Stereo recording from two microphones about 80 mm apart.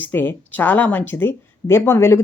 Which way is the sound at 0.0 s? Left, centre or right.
Left.